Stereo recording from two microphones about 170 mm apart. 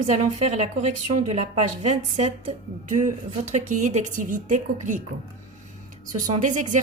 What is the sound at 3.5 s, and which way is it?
Speech, 45° right (ahead or behind).